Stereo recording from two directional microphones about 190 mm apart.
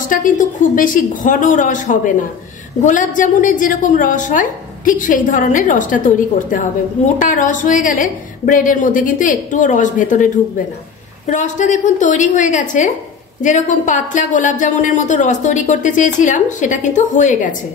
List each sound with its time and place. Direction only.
0.1 s a woman's voice: 45° left (ahead or behind)